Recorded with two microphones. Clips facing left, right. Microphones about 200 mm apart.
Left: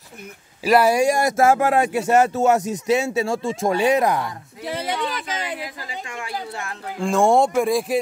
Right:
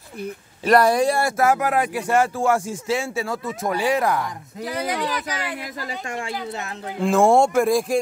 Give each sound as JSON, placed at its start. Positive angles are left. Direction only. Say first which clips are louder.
{"t": 0.7, "sound": "speech", "louder": "even", "side_deg": 5}
{"t": 1.3, "sound": "speech", "louder": "left 3 dB", "side_deg": 25}
{"t": 5.9, "sound": "speech", "louder": "right 3 dB", "side_deg": -45}
{"t": 7.0, "sound": "speech", "louder": "right 1 dB", "side_deg": 0}